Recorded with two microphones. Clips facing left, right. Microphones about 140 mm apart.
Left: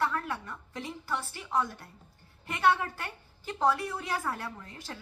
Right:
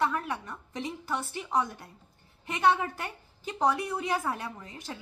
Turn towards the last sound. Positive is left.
turn(degrees=-15)  # may be behind; listen again after turning